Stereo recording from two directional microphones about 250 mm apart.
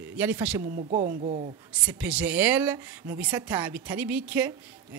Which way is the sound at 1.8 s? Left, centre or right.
Centre.